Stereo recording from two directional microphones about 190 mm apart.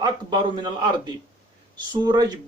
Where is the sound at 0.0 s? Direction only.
25° right (ahead or behind).